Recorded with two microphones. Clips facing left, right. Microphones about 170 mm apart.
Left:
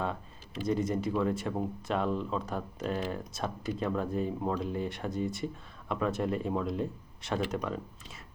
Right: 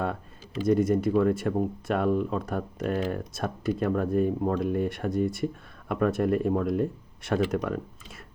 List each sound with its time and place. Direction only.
0.7 s speech: 55° right (ahead or behind)